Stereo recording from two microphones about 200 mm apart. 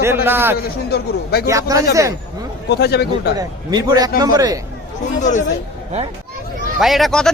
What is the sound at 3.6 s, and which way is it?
Speech, 20° right (ahead or behind).